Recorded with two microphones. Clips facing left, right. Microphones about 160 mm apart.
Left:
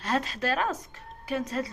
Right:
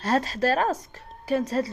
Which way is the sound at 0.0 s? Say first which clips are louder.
Right 5 dB; 35° right (ahead or behind).